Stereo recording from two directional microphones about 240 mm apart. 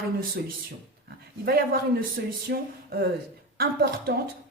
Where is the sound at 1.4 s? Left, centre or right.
Right.